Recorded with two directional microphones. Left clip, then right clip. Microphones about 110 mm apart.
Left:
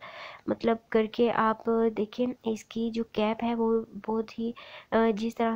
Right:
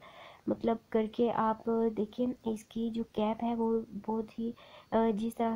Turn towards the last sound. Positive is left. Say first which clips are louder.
# left 5 dB
turn(degrees=15)  # may be behind; listen again after turning